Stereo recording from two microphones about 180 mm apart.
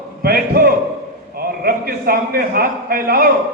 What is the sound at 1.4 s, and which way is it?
A man's voice, 55° right (ahead or behind).